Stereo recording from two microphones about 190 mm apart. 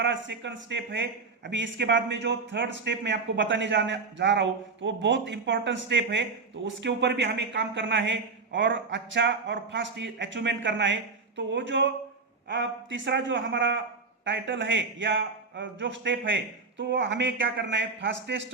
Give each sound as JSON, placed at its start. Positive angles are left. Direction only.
{"t": 0.0, "sound": "a man's voice", "side_deg": -70}